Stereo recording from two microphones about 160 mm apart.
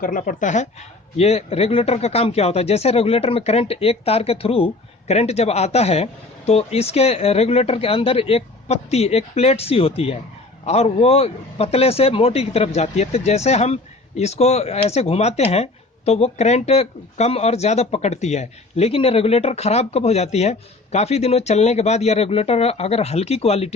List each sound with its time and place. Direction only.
0.0 s speech: 55° left (ahead or behind); by 23.7 s 40° left (ahead or behind)